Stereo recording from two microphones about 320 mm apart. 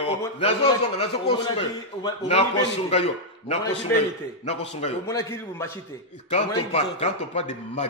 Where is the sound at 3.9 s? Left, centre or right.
Centre.